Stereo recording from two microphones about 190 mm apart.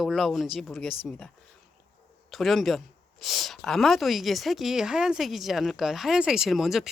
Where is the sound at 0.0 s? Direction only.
Centre (ahead or behind).